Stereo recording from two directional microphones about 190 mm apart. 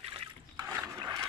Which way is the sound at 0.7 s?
15° right (ahead or behind).